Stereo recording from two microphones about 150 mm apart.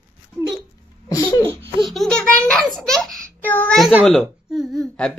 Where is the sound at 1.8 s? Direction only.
Centre (ahead or behind).